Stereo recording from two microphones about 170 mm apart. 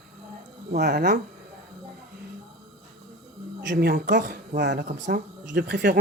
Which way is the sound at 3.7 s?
65° right (ahead or behind).